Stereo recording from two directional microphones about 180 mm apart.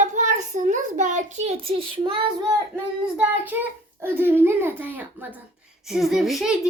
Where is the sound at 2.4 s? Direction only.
15° right (ahead or behind).